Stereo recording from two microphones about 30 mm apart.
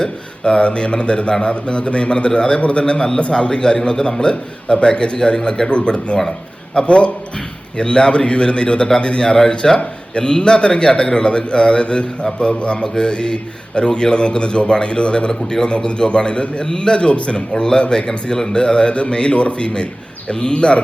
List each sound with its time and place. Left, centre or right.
0.0 s a man's voice: left
17.5 s a man's voice: left